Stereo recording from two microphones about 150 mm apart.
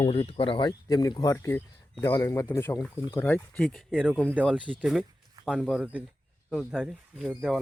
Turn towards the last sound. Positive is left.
turn(degrees=-5)  # may be behind; listen again after turning